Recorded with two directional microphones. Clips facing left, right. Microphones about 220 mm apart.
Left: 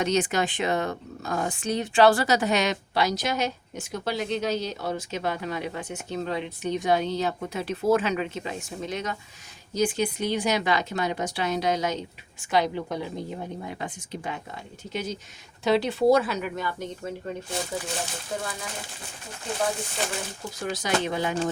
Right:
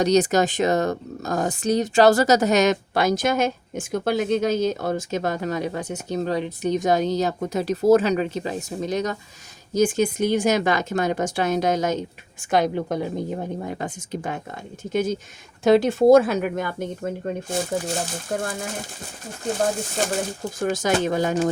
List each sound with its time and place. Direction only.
0.0 s a woman's voice: 40° right (ahead or behind)
20.0 s a woman's voice: 45° right (ahead or behind)